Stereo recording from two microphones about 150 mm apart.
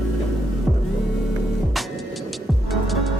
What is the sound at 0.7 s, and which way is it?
Music, centre (ahead or behind).